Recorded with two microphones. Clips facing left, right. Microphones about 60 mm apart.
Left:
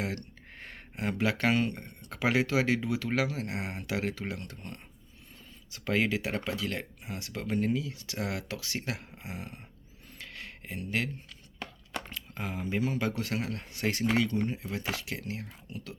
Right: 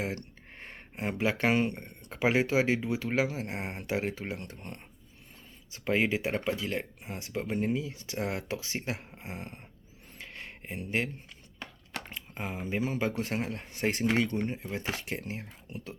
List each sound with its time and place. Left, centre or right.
0.0 s speech: right
10.2 s a sound: right
11.6 s speech: centre